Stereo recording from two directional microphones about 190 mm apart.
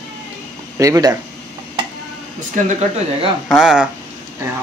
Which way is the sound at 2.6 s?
40° right (ahead or behind).